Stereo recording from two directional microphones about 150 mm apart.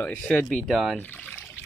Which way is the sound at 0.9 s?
10° left (ahead or behind).